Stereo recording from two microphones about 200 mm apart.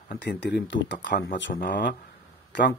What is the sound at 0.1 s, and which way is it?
Speech, 60° left (ahead or behind).